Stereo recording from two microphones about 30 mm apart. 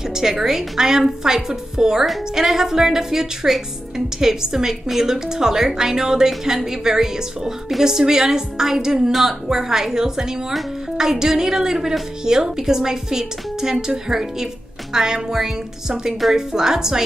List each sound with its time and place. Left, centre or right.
0.1 s a woman's voice: centre